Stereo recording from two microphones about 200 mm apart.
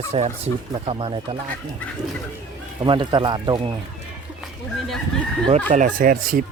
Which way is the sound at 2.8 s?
25° right (ahead or behind).